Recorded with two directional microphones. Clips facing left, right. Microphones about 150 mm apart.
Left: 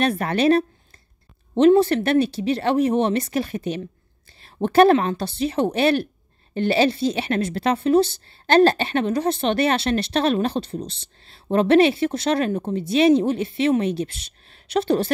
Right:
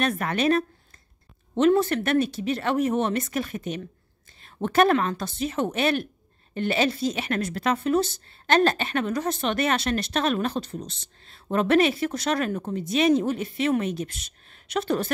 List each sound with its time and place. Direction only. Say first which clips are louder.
0.0 s a woman's voice: left 4 dB; 30° left (ahead or behind)